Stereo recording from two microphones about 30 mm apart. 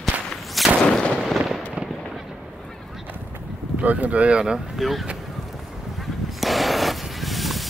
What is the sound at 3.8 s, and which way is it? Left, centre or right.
Speech, right.